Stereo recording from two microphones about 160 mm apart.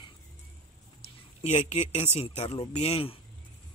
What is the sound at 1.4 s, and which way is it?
Speech, 45° left (ahead or behind).